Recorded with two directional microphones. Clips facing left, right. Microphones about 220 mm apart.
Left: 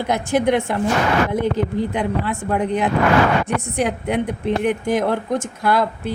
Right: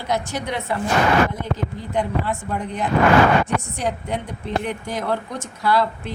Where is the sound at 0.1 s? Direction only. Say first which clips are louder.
Left 7 dB; 50° left (ahead or behind).